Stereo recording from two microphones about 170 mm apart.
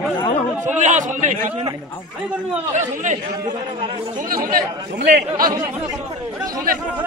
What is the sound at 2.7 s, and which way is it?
Speech, 45° right (ahead or behind).